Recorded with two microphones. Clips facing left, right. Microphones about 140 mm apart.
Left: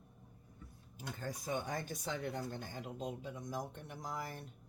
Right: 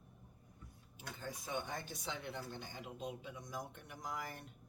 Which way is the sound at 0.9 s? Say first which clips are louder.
Left 4 dB; 45° left (ahead or behind).